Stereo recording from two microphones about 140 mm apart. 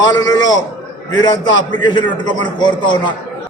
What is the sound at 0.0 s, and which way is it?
Speech, 30° left (ahead or behind).